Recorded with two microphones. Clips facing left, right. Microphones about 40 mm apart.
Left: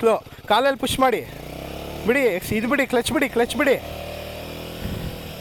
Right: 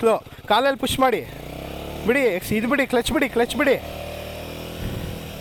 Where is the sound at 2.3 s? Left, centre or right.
Right.